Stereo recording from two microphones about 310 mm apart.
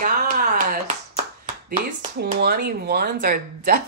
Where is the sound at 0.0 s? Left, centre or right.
Right.